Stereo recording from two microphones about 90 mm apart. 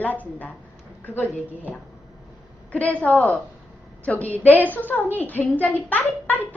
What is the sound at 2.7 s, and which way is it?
A man's voice, 15° left (ahead or behind).